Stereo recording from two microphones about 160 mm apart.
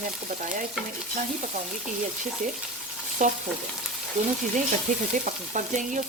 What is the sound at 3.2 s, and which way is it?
Stir, 50° right (ahead or behind).